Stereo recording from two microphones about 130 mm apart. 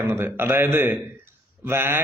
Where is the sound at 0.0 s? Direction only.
15° right (ahead or behind).